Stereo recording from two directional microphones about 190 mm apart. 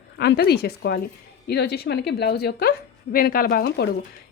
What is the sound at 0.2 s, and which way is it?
A woman's voice, 55° left (ahead or behind).